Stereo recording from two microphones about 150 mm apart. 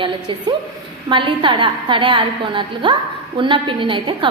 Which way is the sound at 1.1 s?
35° right (ahead or behind).